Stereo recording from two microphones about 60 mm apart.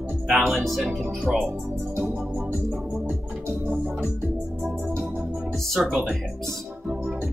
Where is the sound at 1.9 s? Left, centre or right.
Right.